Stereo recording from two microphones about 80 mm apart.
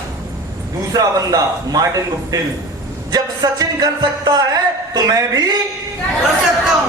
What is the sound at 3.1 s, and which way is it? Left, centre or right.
Music, right.